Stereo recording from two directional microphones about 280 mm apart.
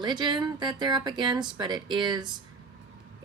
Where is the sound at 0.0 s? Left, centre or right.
Centre.